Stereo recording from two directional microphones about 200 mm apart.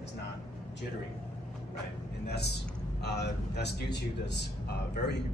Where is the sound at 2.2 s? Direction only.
55° left (ahead or behind).